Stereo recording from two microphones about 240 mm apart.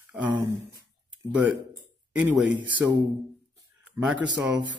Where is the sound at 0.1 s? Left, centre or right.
Centre.